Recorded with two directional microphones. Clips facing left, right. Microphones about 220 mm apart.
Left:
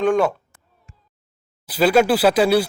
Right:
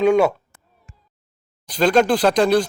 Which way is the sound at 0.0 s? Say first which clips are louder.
Right 2 dB; 5° right (ahead or behind).